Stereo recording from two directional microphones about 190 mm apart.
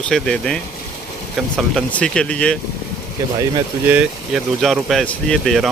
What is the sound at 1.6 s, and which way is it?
Speech, 5° left (ahead or behind).